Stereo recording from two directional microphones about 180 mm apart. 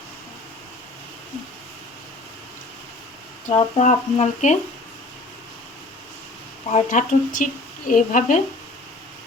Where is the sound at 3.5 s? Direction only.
35° left (ahead or behind).